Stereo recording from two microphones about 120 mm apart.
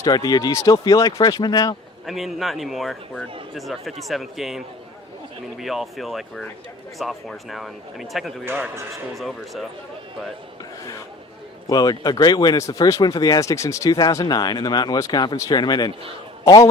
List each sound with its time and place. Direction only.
0.0 s speech: 30° left (ahead or behind)
2.0 s speech: centre (ahead or behind)
8.4 s a man's voice: 20° right (ahead or behind)
8.9 s speech: centre (ahead or behind)
11.7 s speech: 35° left (ahead or behind)